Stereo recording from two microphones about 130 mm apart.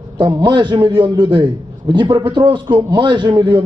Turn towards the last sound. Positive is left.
turn(degrees=-40)  # may be behind; listen again after turning